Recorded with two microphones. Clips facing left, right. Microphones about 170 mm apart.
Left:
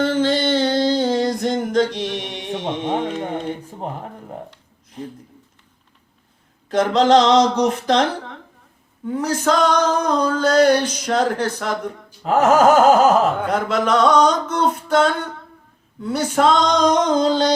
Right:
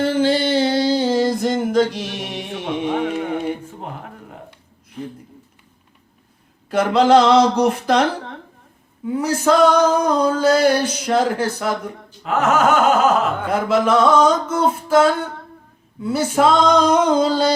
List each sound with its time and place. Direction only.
0.0 s a sound: 10° right (ahead or behind)
3.0 s male singing: 10° right (ahead or behind)
6.7 s male singing: 10° right (ahead or behind)
9.0 s male singing: 5° right (ahead or behind)
12.2 s a sound: 35° left (ahead or behind)
13.5 s male singing: 5° right (ahead or behind)